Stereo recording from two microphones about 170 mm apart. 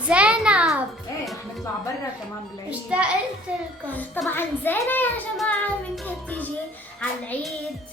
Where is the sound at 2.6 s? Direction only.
5° right (ahead or behind).